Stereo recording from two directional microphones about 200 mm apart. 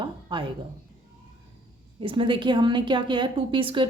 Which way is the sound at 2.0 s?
25° right (ahead or behind).